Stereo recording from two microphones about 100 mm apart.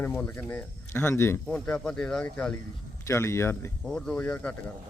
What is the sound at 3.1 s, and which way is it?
Speech, 30° left (ahead or behind).